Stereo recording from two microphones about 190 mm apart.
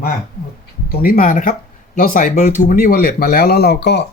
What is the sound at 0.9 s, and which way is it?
Speech, 50° left (ahead or behind).